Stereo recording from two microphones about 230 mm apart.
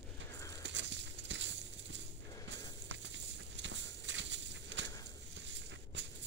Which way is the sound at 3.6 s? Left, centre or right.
Right.